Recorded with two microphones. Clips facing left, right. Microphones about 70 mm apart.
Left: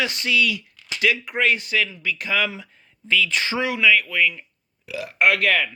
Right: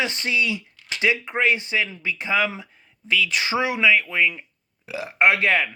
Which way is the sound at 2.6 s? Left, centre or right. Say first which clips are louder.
Left 1 dB; centre.